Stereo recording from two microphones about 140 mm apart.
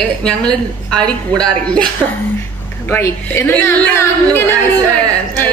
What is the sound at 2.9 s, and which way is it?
A woman's voice, 15° left (ahead or behind).